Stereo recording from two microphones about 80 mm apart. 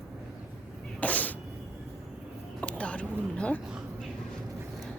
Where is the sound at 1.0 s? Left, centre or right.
Centre.